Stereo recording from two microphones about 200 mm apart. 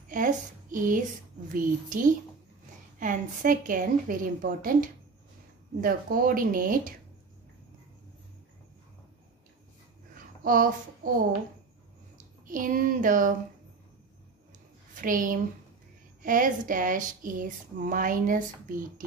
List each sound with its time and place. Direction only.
0.1 s a woman's voice: 40° right (ahead or behind)
5.8 s speech: 45° right (ahead or behind)
10.1 s a sound: 45° right (ahead or behind)
12.4 s speech: 45° right (ahead or behind)
15.0 s a woman's voice: 45° right (ahead or behind)